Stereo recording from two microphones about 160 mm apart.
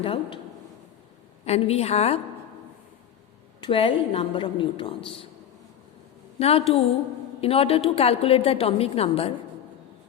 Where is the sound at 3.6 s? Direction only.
30° left (ahead or behind).